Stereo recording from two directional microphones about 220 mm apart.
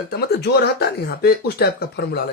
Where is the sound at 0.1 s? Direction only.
45° left (ahead or behind).